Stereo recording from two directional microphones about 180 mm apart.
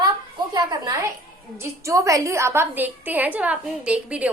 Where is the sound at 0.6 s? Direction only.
20° right (ahead or behind).